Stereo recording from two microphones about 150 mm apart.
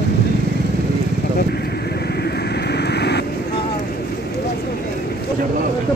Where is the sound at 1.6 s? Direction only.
90° left.